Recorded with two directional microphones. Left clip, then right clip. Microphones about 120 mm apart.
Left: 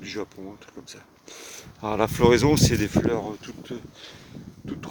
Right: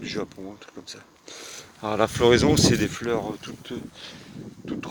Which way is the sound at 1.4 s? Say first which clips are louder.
Even; 40° left (ahead or behind).